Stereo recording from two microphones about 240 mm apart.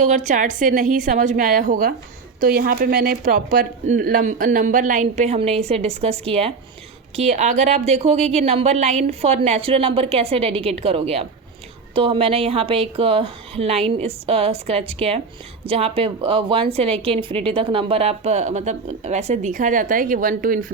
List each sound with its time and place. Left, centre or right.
0.0 s a woman's voice: right